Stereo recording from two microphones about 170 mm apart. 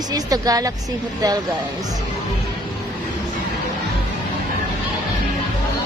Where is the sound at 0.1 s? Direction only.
20° right (ahead or behind).